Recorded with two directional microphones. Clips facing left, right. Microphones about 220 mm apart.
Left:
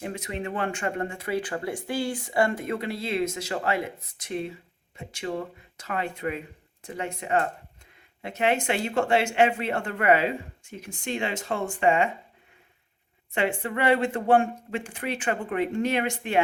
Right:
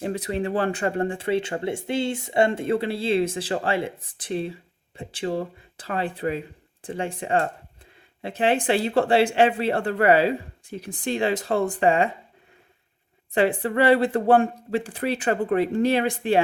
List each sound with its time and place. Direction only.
0.0 s speech: 35° right (ahead or behind)
13.3 s speech: 35° right (ahead or behind)